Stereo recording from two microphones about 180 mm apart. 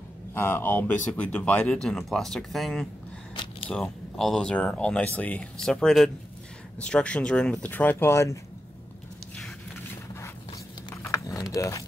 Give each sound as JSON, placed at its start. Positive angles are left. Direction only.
{"t": 0.3, "sound": "speech", "side_deg": 10}
{"t": 10.9, "sound": "a sound", "side_deg": 10}
{"t": 11.5, "sound": "speech", "side_deg": 15}